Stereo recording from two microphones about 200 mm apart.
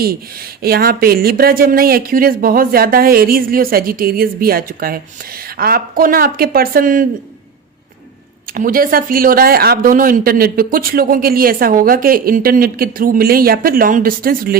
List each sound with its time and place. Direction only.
0.6 s speech: 50° right (ahead or behind)
8.5 s speech: 45° right (ahead or behind)